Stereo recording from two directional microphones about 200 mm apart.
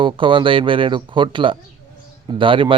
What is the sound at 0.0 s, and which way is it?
Speech, 25° right (ahead or behind).